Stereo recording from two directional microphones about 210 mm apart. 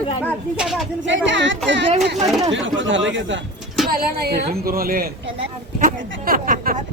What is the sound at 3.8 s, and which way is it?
Speech, 45° right (ahead or behind).